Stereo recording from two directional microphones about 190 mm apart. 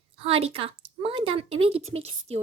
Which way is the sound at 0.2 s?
30° right (ahead or behind).